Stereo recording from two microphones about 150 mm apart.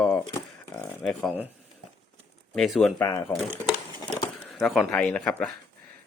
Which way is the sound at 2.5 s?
Centre (ahead or behind).